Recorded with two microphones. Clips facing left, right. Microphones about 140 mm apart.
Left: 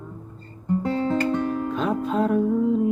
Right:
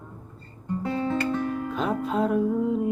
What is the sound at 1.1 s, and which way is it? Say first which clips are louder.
Music: left 3 dB; 30° left (ahead or behind).